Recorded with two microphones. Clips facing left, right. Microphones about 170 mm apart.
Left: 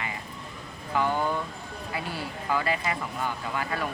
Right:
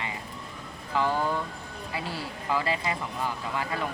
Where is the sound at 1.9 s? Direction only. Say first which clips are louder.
Even; 25° right (ahead or behind).